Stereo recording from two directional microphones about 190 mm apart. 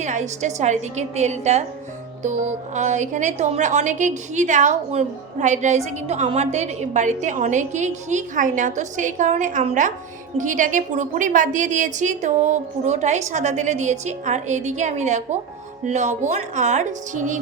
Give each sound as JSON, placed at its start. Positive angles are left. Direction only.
{"t": 0.0, "sound": "speech", "side_deg": -40}